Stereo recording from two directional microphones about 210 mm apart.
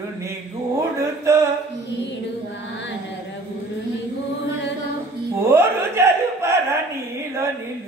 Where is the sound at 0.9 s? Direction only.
15° right (ahead or behind).